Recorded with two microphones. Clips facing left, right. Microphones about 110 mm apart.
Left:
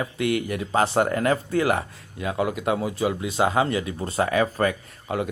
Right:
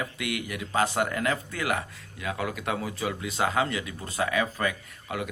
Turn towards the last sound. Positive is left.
turn(degrees=35)  # may be behind; listen again after turning